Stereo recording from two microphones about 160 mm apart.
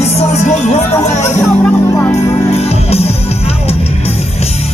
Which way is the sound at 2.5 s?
40° left (ahead or behind).